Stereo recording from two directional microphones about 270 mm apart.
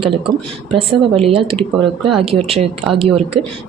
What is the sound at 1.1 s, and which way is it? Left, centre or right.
A woman's voice, right.